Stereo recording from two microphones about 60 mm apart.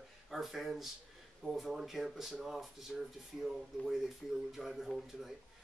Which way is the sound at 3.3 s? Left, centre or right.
Right.